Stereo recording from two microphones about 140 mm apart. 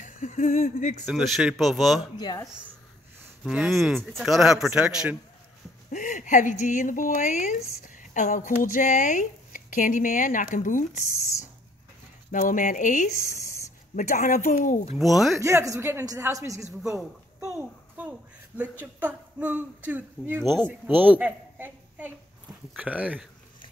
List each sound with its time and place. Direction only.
0.0 s speech: 65° left (ahead or behind)
1.0 s speech: centre (ahead or behind)
2.1 s speech: 30° left (ahead or behind)
3.4 s speech: 5° right (ahead or behind)
5.9 s speech: 65° left (ahead or behind)
12.3 s speech: 70° left (ahead or behind)
15.0 s speech: centre (ahead or behind)
15.3 s speech: 20° right (ahead or behind)
18.5 s speech: 15° left (ahead or behind)
18.9 s a woman's voice: 10° right (ahead or behind)